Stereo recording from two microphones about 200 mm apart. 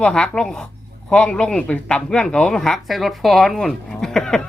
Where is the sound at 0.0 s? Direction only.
5° left (ahead or behind).